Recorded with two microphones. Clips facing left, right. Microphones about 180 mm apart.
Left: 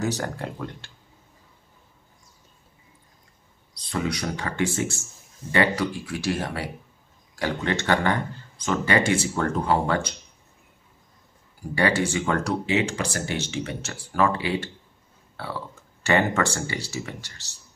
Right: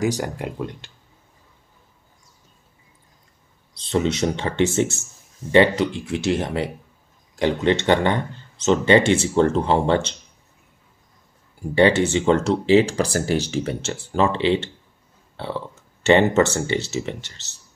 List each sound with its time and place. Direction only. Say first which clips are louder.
0.0 s speech: right 4 dB; 15° right (ahead or behind)
3.7 s speech: right 6 dB; 25° right (ahead or behind)
11.7 s speech: right 6 dB; 25° right (ahead or behind)